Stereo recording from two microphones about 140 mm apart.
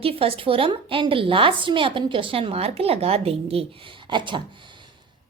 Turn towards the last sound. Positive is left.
turn(degrees=-35)  # may be behind; listen again after turning